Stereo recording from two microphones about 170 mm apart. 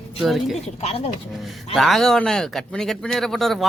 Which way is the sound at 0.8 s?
35° left (ahead or behind).